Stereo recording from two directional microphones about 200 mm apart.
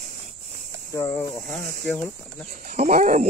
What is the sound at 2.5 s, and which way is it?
Speech, 35° right (ahead or behind).